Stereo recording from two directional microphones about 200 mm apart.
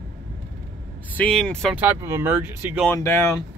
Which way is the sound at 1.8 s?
10° right (ahead or behind).